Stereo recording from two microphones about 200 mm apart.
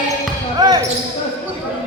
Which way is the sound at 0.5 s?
20° right (ahead or behind).